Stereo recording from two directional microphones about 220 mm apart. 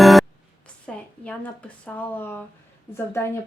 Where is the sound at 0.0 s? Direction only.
Centre (ahead or behind).